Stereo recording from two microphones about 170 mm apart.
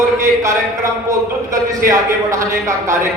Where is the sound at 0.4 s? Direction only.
20° right (ahead or behind).